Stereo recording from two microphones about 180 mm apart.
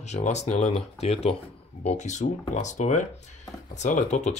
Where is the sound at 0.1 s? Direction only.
40° left (ahead or behind).